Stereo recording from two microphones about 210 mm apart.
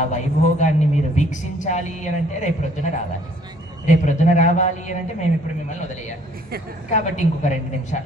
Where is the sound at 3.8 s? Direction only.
35° left (ahead or behind).